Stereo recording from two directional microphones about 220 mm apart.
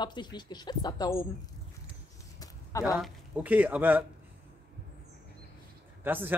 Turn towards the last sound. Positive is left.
turn(degrees=-10)  # may be behind; listen again after turning